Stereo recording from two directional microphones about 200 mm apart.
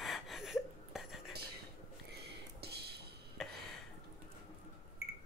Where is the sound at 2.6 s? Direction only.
55° right (ahead or behind).